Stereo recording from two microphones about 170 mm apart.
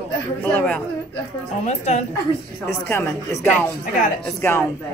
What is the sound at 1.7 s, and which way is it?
Speech, 45° left (ahead or behind).